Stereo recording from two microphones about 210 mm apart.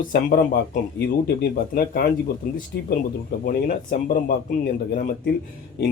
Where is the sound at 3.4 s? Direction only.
40° left (ahead or behind).